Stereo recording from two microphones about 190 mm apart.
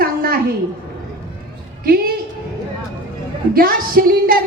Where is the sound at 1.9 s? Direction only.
50° right (ahead or behind).